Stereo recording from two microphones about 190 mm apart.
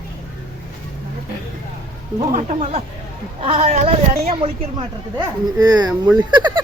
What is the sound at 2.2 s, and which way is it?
A woman's voice, 40° right (ahead or behind).